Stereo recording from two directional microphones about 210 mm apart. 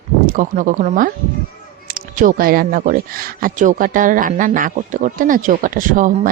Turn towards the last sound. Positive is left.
turn(degrees=-40)  # may be behind; listen again after turning